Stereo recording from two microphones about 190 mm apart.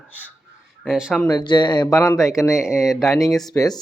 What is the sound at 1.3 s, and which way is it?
Speech, 20° left (ahead or behind).